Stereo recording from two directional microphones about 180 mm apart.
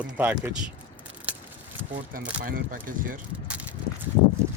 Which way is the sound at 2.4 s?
50° right (ahead or behind).